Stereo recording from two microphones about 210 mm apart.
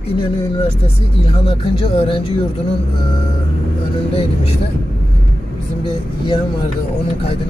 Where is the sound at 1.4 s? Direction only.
25° left (ahead or behind).